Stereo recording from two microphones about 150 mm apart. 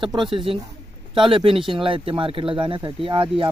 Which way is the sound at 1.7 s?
35° right (ahead or behind).